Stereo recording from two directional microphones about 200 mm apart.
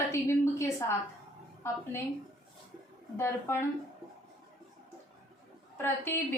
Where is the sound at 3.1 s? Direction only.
15° left (ahead or behind).